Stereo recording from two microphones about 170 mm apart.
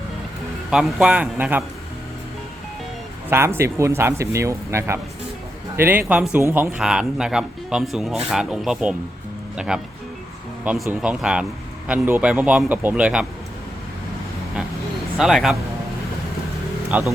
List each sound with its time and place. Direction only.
0.7 s a man's voice: centre (ahead or behind)
3.2 s a man's voice: 15° right (ahead or behind)
15.2 s a man's voice: centre (ahead or behind)
16.9 s speech: 10° right (ahead or behind)